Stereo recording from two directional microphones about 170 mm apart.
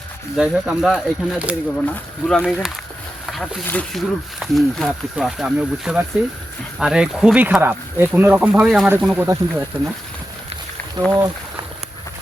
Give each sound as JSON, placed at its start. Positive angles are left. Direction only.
{"t": 0.3, "sound": "speech", "side_deg": -5}
{"t": 3.2, "sound": "a sound", "side_deg": 0}
{"t": 3.7, "sound": "speech", "side_deg": 5}
{"t": 11.0, "sound": "speech", "side_deg": -25}